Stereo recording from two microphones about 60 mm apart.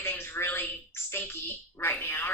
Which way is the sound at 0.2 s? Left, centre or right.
Left.